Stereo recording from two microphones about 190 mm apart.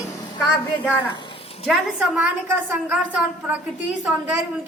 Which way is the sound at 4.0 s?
10° right (ahead or behind).